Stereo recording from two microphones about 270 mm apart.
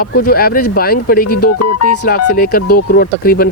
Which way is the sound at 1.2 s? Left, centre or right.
Left.